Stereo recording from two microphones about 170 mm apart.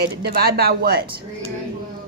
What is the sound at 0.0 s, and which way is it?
Speech, 65° right (ahead or behind).